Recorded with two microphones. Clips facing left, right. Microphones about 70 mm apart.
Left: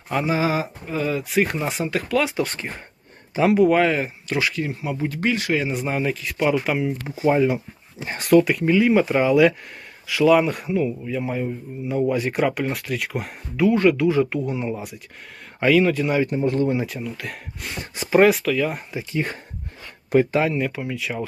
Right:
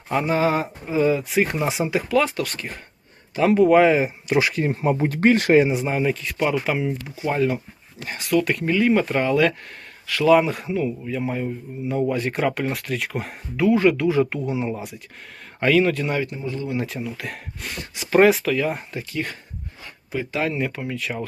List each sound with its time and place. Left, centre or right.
0.1 s a man's voice: centre
2.4 s speech: left
3.4 s a man's voice: centre
4.4 s speech: right
5.6 s a man's voice: centre
7.2 s speech: centre
8.1 s speech: left
8.4 s a man's voice: centre
16.2 s speech: left
16.7 s a man's voice: centre
17.7 s speech: left
18.1 s a man's voice: centre
18.9 s speech: left
20.5 s a man's voice: centre